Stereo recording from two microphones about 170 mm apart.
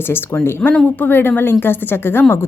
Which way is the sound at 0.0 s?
15° left (ahead or behind).